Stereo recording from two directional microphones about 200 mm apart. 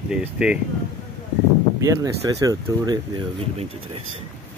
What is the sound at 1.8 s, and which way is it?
Speech, 15° right (ahead or behind).